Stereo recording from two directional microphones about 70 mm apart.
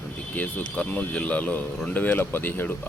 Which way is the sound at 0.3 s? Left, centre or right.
Left.